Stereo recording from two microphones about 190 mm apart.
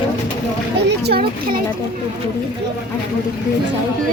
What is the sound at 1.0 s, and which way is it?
Speech, 55° right (ahead or behind).